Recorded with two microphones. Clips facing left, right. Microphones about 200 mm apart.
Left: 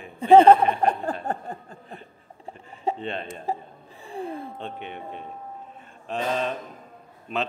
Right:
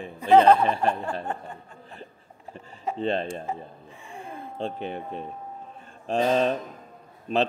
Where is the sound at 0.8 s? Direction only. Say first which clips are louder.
Left 2 dB; 40° left (ahead or behind).